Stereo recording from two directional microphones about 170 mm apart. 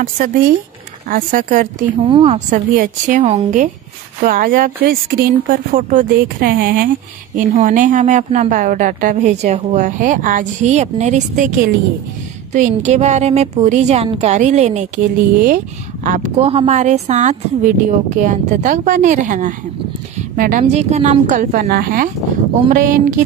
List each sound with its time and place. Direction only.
0.2 s a woman's voice: 50° right (ahead or behind)
2.0 s a woman's voice: 30° right (ahead or behind)
2.5 s a woman's voice: 50° right (ahead or behind)
12.5 s a woman's voice: 45° right (ahead or behind)
15.3 s a woman's voice: 55° right (ahead or behind)
16.4 s a woman's voice: 40° right (ahead or behind); by 20.6 s 55° right (ahead or behind)
20.6 s a woman's voice: 40° right (ahead or behind)